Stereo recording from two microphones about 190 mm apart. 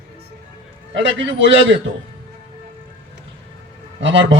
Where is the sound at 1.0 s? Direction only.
75° right (ahead or behind).